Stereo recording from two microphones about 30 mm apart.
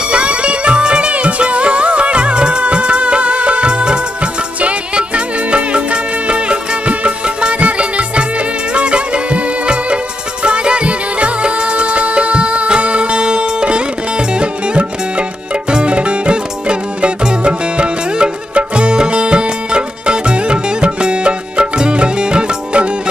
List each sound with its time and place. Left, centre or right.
0.1 s music: right
1.1 s music: right
7.2 s music: right